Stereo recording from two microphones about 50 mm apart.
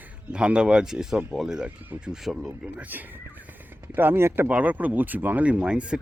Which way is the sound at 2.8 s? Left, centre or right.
Right.